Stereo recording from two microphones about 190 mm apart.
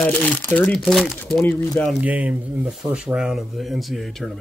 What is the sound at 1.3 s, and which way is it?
Speech, 10° left (ahead or behind).